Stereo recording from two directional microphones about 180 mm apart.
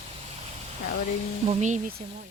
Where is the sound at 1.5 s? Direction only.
40° right (ahead or behind).